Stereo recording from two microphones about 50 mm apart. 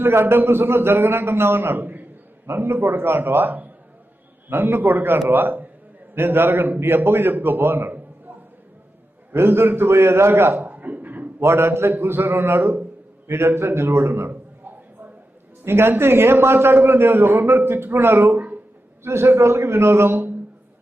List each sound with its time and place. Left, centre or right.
0.0 s a man's voice: right
9.3 s a man's voice: right
10.6 s a sound: right
11.3 s a man's voice: right
15.6 s a man's voice: right
18.3 s a sound: right
19.0 s a man's voice: right